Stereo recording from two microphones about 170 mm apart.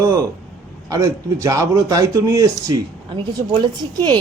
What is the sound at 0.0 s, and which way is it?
A man's voice, 20° right (ahead or behind).